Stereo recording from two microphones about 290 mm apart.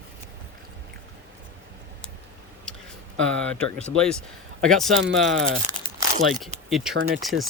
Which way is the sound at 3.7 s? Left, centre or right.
Centre.